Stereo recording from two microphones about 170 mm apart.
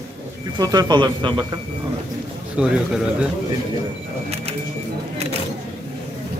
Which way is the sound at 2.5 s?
5° right (ahead or behind).